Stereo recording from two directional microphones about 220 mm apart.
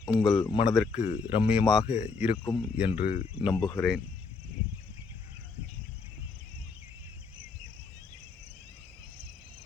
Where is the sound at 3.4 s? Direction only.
20° left (ahead or behind).